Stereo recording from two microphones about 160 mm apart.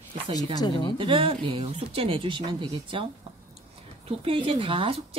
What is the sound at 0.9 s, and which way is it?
Speech, 35° right (ahead or behind).